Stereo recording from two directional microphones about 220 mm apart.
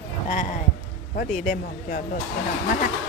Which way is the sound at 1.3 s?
35° left (ahead or behind).